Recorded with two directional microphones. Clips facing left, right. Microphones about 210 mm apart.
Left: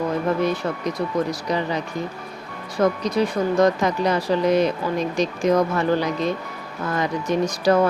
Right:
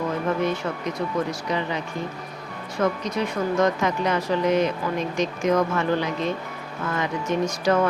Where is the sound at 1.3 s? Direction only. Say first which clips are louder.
Left 3 dB; 40° left (ahead or behind).